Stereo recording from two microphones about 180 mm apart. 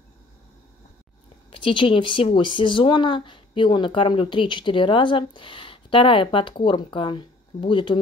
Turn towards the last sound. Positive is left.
turn(degrees=25)  # may be behind; listen again after turning